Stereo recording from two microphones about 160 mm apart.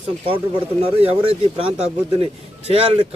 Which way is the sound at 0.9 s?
35° right (ahead or behind).